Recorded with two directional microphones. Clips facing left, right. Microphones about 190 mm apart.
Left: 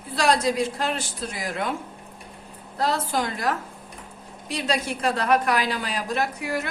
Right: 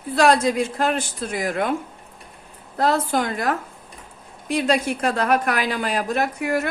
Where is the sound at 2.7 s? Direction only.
50° right (ahead or behind).